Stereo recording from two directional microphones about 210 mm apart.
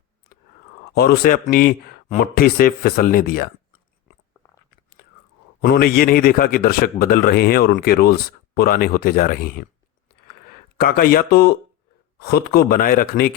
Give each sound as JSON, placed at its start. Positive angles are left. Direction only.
{"t": 0.9, "sound": "speech", "side_deg": 45}
{"t": 4.1, "sound": "biting", "side_deg": -5}
{"t": 5.6, "sound": "speech", "side_deg": 45}
{"t": 10.8, "sound": "speech", "side_deg": 45}